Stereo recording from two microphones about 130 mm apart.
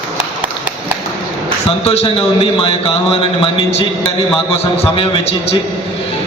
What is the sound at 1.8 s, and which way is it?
Speech, 50° left (ahead or behind).